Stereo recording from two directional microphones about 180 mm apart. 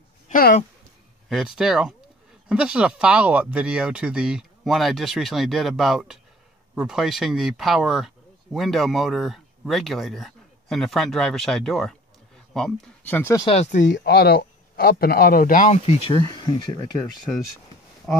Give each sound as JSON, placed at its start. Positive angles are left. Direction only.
{"t": 0.3, "sound": "a sound", "side_deg": 55}
{"t": 1.3, "sound": "speech", "side_deg": 0}
{"t": 13.5, "sound": "speech", "side_deg": 40}
{"t": 13.9, "sound": "a man's voice", "side_deg": 65}
{"t": 16.2, "sound": "speech", "side_deg": 20}